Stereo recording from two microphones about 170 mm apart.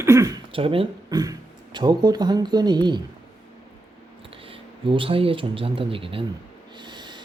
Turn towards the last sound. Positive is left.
turn(degrees=-25)  # may be behind; listen again after turning